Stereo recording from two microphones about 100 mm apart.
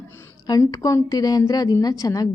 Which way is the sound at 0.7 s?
35° left (ahead or behind).